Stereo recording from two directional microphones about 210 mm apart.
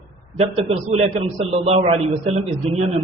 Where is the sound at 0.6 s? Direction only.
30° right (ahead or behind).